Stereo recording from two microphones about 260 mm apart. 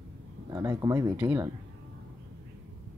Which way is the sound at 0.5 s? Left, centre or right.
Centre.